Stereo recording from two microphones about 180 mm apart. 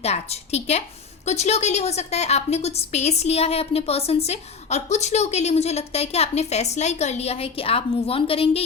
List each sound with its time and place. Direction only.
0.0 s a woman's voice: 35° left (ahead or behind)